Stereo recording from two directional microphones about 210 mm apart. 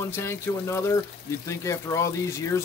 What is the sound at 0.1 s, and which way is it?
Speech, 10° left (ahead or behind).